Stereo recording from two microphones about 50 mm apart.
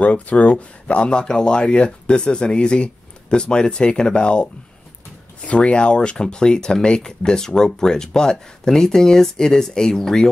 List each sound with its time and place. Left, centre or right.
0.0 s speech: left; by 10.2 s centre